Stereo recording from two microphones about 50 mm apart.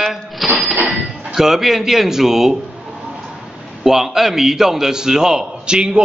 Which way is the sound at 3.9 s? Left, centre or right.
Centre.